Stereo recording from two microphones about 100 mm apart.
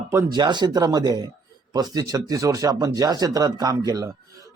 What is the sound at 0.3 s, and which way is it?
Speech, 45° right (ahead or behind).